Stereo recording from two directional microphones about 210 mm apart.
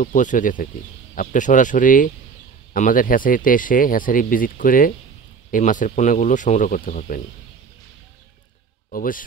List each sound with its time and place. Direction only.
0.0 s speech: 40° left (ahead or behind)
8.9 s speech: 40° left (ahead or behind)